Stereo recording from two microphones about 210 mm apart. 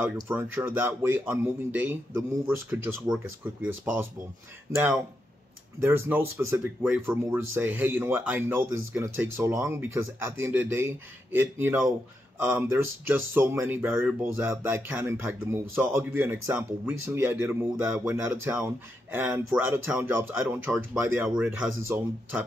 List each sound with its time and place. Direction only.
0.0 s speech: 10° right (ahead or behind)
5.8 s speech: 10° right (ahead or behind)